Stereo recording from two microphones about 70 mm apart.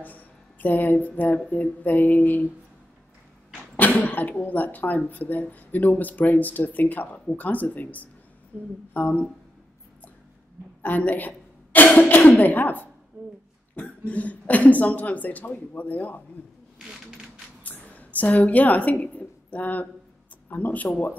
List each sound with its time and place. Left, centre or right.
0.0 s speech: left
3.7 s speech: left
8.5 s speech: right
8.9 s speech: left
10.8 s cough: left
12.4 s speech: left
13.2 s a sound: right
13.7 s speech: left
16.7 s a sound: centre
17.6 s a sound: left
20.4 s speech: left